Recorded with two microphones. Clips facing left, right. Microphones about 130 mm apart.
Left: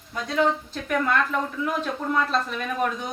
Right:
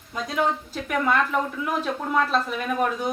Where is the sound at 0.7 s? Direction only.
10° right (ahead or behind).